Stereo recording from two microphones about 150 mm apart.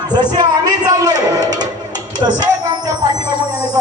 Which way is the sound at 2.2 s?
30° right (ahead or behind).